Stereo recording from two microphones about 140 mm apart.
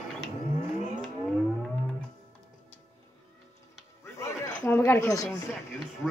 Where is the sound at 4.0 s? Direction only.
20° left (ahead or behind).